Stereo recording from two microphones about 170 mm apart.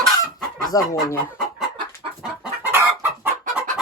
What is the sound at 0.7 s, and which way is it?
Speech, 20° left (ahead or behind).